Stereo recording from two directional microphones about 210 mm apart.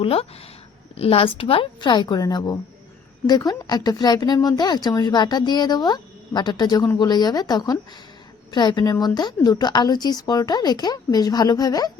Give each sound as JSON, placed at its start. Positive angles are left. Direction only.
{"t": 0.0, "sound": "speech", "side_deg": 25}